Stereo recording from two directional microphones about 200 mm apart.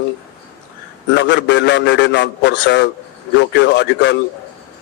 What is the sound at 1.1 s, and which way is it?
A man's voice, 60° left (ahead or behind).